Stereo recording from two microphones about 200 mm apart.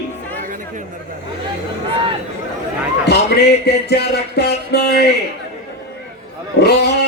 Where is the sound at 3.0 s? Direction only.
55° left (ahead or behind).